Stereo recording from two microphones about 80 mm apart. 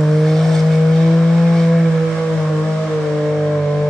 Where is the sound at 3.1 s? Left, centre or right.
Centre.